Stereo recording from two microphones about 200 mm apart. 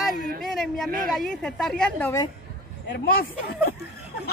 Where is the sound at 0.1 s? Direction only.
45° right (ahead or behind).